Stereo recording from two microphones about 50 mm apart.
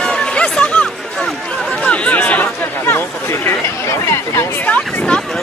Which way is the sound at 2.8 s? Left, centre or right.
Left.